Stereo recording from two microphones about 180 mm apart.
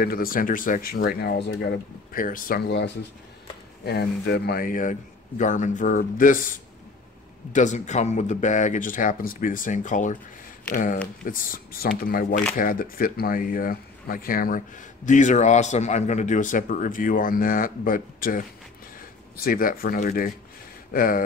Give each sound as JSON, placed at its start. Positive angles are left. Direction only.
{"t": 0.0, "sound": "speech", "side_deg": 55}
{"t": 1.0, "sound": "speech", "side_deg": 70}
{"t": 7.5, "sound": "speech", "side_deg": 40}